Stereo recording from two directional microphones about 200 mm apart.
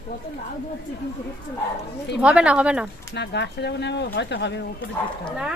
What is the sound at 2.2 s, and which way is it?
Speech, 5° right (ahead or behind).